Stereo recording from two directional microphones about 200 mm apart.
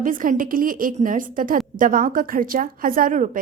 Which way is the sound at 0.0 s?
40° right (ahead or behind).